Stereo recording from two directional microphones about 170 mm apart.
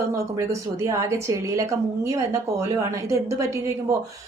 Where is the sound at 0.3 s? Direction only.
15° right (ahead or behind).